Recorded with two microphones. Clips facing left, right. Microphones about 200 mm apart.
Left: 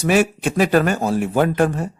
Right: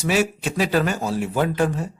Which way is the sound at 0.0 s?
55° left (ahead or behind).